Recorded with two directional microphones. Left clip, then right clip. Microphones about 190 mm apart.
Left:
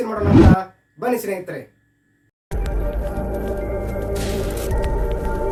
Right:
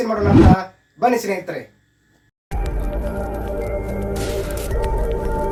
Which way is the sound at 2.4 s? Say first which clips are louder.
Left 1 dB; centre (ahead or behind).